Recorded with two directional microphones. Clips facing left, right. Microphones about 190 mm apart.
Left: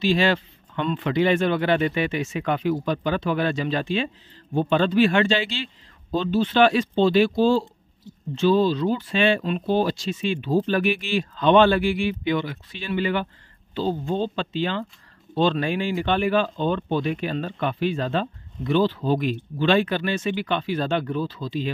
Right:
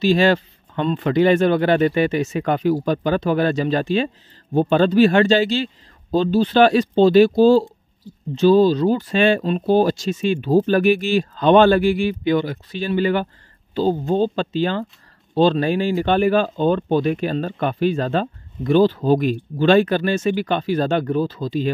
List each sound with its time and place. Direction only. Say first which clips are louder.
0.0 s speech: right 5 dB; 40° right (ahead or behind)